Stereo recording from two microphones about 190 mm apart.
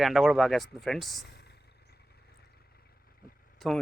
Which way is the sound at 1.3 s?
60° left (ahead or behind).